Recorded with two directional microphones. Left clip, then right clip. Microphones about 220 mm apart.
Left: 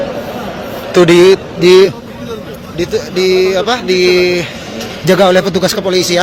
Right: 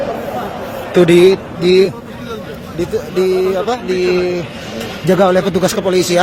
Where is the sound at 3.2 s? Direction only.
10° right (ahead or behind).